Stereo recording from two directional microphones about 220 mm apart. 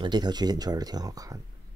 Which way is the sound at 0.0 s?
20° right (ahead or behind).